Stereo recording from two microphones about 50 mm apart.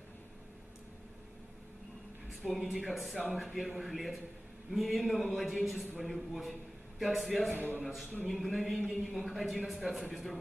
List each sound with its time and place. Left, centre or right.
2.6 s a man's voice: centre
7.5 s a man's voice: right
7.8 s a man's voice: centre